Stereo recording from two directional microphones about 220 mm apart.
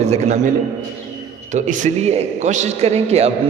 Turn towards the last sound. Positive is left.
turn(degrees=-30)  # may be behind; listen again after turning